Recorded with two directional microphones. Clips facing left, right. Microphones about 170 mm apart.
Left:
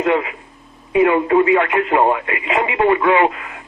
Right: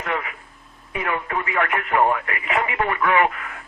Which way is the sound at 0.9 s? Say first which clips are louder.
Left 13 dB; 25° left (ahead or behind).